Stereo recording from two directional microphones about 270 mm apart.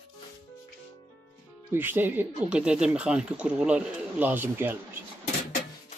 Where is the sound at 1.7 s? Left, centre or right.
Centre.